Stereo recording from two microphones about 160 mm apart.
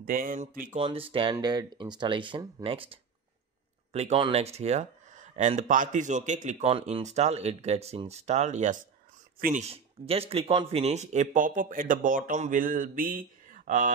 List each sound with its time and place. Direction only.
0.0 s speech: 65° right (ahead or behind)
0.7 s speech: 35° right (ahead or behind); by 9.7 s 55° right (ahead or behind)
9.7 s speech: 40° right (ahead or behind); by 12.2 s 55° right (ahead or behind)
12.3 s mantra: 50° right (ahead or behind)